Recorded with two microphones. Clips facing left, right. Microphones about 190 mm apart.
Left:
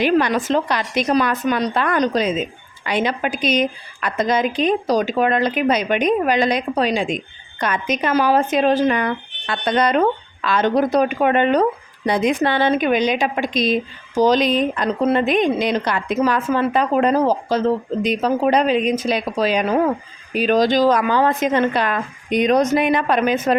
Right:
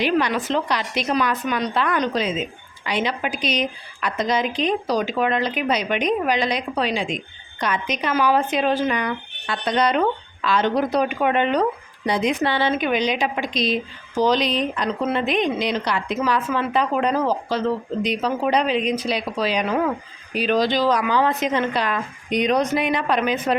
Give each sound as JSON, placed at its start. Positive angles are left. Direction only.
{"t": 0.0, "sound": "a woman's voice", "side_deg": 50}